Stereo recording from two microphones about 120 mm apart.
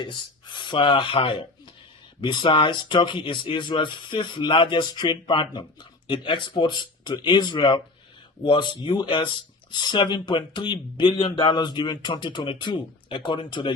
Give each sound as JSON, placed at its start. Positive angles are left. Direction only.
{"t": 0.0, "sound": "speech", "side_deg": 40}